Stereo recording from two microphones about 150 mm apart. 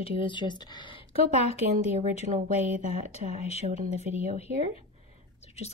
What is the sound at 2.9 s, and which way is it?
Speech, 45° left (ahead or behind).